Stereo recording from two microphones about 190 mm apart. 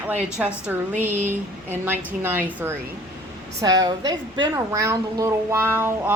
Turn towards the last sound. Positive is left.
turn(degrees=-10)  # may be behind; listen again after turning